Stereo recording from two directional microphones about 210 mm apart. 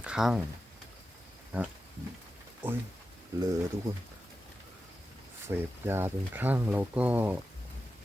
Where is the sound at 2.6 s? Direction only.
10° right (ahead or behind).